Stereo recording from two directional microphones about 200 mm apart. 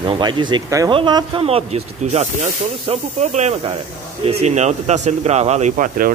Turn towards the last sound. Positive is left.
turn(degrees=-45)  # may be behind; listen again after turning